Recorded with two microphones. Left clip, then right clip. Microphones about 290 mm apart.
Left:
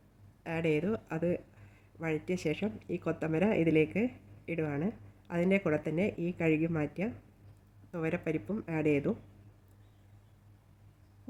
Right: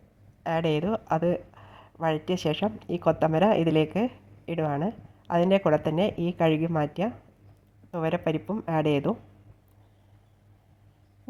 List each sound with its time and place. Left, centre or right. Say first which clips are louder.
0.4 s a woman's voice: right 6 dB; centre